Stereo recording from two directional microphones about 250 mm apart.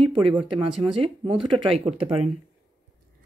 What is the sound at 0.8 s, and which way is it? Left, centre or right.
Speech, right.